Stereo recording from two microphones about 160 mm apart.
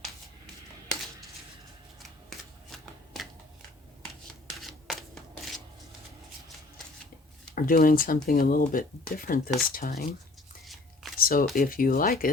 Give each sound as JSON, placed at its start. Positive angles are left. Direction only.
{"t": 2.0, "sound": "shuffling cards", "side_deg": 0}
{"t": 4.4, "sound": "scissors", "side_deg": 0}
{"t": 7.5, "sound": "speech", "side_deg": 60}
{"t": 11.2, "sound": "a sound", "side_deg": 65}
{"t": 11.5, "sound": "speech", "side_deg": 60}